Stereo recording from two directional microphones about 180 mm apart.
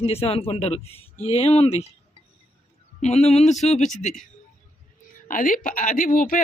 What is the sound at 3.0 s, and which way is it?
Speech, 35° left (ahead or behind).